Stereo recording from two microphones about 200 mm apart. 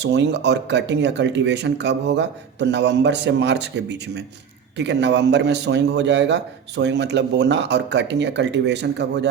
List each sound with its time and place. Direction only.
0.0 s a man's voice: 60° right (ahead or behind)